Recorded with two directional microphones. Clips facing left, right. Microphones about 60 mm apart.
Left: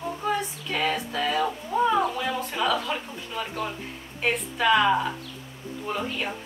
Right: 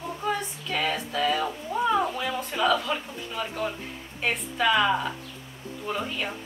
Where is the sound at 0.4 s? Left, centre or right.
Centre.